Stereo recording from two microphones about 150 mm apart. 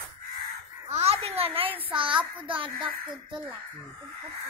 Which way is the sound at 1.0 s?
40° right (ahead or behind).